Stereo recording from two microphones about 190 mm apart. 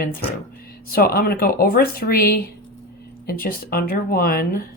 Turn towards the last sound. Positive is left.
turn(degrees=50)  # may be behind; listen again after turning